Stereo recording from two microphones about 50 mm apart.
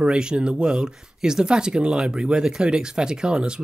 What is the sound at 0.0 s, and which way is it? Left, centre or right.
Speech, centre.